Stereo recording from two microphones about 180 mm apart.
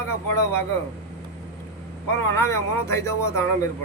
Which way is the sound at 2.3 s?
15° left (ahead or behind).